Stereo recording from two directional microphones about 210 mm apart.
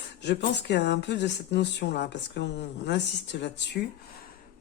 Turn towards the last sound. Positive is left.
turn(degrees=55)  # may be behind; listen again after turning